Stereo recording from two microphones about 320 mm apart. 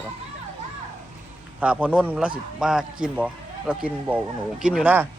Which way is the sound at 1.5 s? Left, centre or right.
Centre.